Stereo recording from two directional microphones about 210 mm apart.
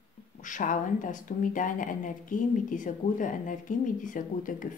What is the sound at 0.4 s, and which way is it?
A woman's voice, 35° left (ahead or behind).